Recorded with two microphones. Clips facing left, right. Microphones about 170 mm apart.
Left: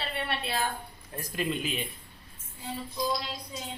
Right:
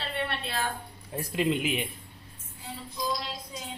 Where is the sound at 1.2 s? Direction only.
20° right (ahead or behind).